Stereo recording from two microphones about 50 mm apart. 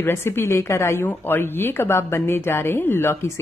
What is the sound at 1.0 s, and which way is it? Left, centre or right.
A woman's voice, left.